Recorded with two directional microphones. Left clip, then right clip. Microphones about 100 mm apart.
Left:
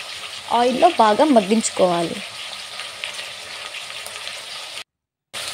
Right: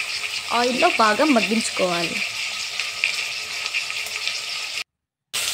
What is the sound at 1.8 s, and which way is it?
Speech, 30° left (ahead or behind).